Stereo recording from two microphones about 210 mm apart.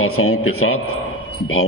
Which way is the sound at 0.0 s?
90° left.